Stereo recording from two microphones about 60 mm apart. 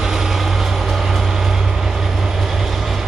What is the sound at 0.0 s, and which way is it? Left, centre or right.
Vehicle, centre.